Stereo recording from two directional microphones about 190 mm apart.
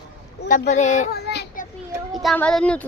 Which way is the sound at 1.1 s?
55° left (ahead or behind).